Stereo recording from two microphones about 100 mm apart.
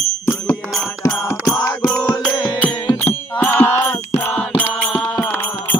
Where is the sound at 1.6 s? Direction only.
40° left (ahead or behind).